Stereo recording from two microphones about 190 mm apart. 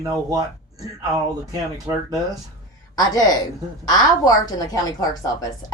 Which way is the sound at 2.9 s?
20° left (ahead or behind).